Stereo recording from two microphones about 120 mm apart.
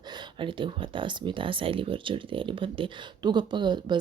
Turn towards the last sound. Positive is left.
turn(degrees=-40)  # may be behind; listen again after turning